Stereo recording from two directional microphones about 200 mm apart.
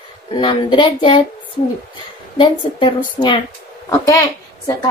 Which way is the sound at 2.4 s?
25° left (ahead or behind).